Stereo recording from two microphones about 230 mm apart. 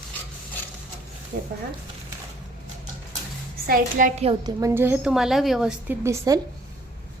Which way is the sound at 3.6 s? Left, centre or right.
Right.